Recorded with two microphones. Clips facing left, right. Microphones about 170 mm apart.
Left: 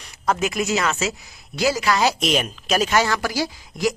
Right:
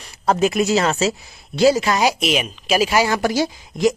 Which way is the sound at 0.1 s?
30° right (ahead or behind).